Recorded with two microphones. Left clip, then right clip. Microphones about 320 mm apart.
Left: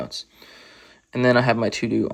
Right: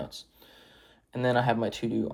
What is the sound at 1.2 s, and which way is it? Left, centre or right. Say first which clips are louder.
Speech: left 8 dB; centre.